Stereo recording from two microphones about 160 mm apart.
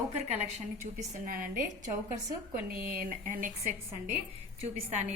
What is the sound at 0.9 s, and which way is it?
Speech, 60° right (ahead or behind).